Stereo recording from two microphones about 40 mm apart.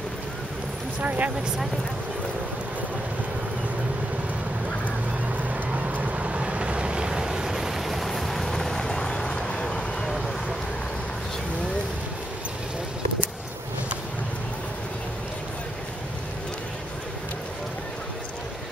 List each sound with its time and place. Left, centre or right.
1.0 s speech: right
5.5 s vehicle: right; by 9.8 s left